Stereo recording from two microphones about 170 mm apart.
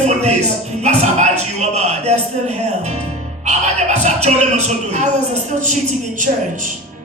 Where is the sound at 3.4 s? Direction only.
45° right (ahead or behind).